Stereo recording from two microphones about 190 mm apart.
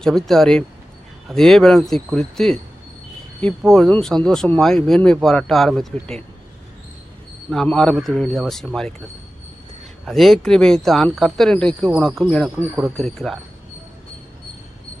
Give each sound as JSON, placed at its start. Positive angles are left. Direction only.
{"t": 0.0, "sound": "speech", "side_deg": 0}
{"t": 3.6, "sound": "speech", "side_deg": 0}
{"t": 7.5, "sound": "speech", "side_deg": 5}
{"t": 10.1, "sound": "speech", "side_deg": 0}